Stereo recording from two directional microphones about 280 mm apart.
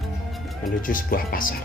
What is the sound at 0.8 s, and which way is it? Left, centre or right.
Speech, left.